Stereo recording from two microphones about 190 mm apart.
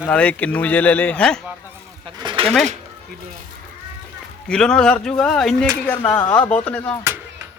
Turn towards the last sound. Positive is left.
turn(degrees=5)  # may be behind; listen again after turning